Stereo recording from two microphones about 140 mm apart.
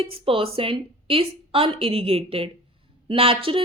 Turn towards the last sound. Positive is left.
turn(degrees=-40)  # may be behind; listen again after turning